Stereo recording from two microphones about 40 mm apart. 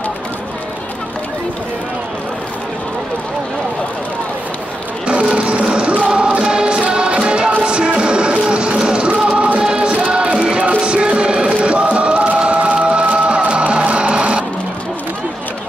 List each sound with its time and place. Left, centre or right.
5.0 s music: right